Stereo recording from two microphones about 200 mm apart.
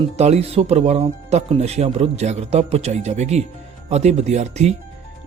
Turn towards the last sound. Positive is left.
turn(degrees=-35)  # may be behind; listen again after turning